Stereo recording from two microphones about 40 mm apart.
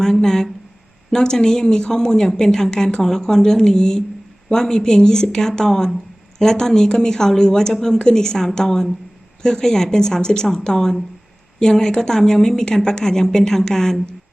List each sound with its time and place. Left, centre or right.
0.0 s a woman's voice: centre